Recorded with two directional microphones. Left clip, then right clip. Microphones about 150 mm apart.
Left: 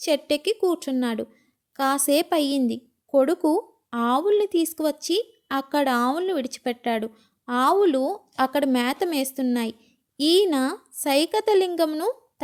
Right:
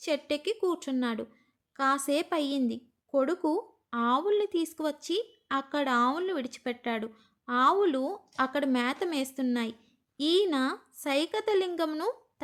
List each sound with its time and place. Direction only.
0.0 s a woman's voice: 40° left (ahead or behind)